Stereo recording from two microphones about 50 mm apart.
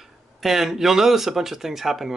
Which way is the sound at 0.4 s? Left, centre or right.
Centre.